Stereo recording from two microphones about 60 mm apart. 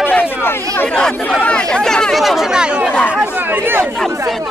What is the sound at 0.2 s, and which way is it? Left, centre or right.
Chatter, left.